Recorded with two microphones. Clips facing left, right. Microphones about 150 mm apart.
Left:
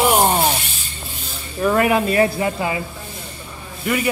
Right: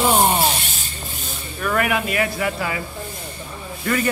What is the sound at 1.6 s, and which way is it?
Speech, 25° left (ahead or behind).